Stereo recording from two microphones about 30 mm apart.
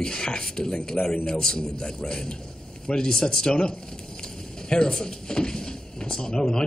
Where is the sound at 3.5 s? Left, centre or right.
Left.